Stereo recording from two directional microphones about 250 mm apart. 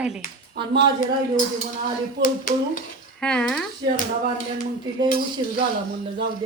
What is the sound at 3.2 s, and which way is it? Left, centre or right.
Speech, centre.